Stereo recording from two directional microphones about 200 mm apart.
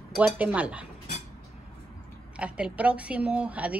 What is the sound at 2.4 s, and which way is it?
Speech, 5° right (ahead or behind).